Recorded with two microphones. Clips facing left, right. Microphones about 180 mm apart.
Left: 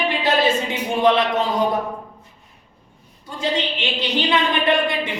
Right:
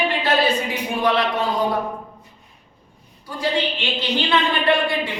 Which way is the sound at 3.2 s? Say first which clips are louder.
Right 1 dB; 20° left (ahead or behind).